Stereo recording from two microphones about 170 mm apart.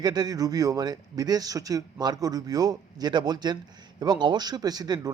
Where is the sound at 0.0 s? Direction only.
25° right (ahead or behind).